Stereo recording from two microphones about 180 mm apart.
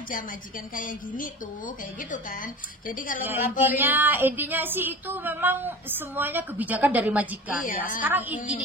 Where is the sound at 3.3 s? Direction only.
10° right (ahead or behind).